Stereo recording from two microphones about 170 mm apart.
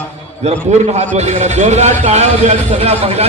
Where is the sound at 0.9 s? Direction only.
40° right (ahead or behind).